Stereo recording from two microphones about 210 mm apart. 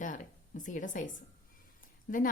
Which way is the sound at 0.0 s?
35° left (ahead or behind).